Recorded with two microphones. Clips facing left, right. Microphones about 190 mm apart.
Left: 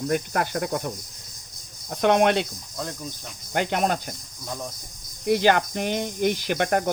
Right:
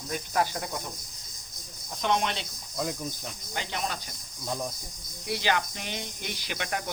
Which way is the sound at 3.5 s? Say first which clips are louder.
Left 11 dB; 55° left (ahead or behind).